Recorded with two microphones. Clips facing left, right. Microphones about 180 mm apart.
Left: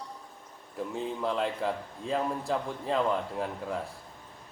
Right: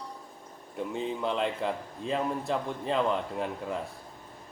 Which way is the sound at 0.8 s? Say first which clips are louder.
Right 1 dB; centre (ahead or behind).